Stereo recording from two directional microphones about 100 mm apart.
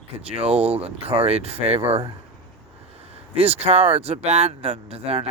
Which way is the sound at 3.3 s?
90° right.